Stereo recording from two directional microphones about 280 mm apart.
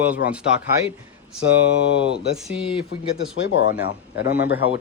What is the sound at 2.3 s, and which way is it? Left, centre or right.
Speech, centre.